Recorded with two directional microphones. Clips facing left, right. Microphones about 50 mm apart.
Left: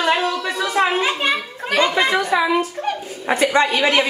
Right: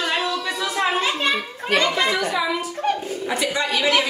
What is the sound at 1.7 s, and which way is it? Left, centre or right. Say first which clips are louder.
Chatter: left 3 dB; centre.